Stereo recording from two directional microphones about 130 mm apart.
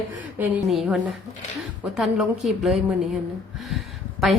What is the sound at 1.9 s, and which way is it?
A woman's voice, centre (ahead or behind).